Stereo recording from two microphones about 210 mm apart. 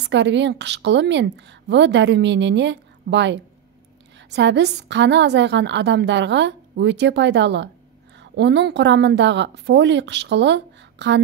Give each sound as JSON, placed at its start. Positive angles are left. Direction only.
{"t": 0.0, "sound": "a woman's voice", "side_deg": -55}